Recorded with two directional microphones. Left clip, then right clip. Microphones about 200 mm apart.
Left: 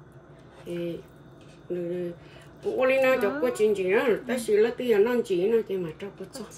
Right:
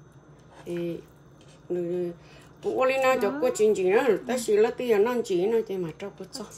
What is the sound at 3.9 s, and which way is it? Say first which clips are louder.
Speech: right 1 dB; 45° right (ahead or behind).